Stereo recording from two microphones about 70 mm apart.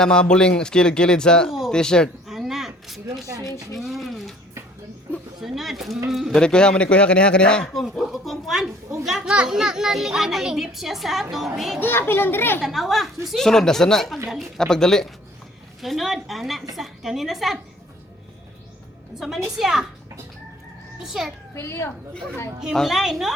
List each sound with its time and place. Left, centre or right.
0.0 s speech: centre
1.5 s a sound: centre
1.7 s speech: centre
2.2 s a sound: centre
3.7 s a child's voice: centre
5.4 s a child's voice: centre
6.4 s speech: centre
7.7 s a child's voice: centre
11.8 s a child's voice: left
12.6 s a child's voice: centre
19.5 s a child's voice: centre
21.0 s a child's voice: centre
21.5 s a child's voice: left
22.7 s a child's voice: centre